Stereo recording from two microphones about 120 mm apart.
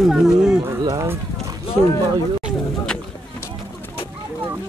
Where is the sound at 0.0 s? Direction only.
5° right (ahead or behind).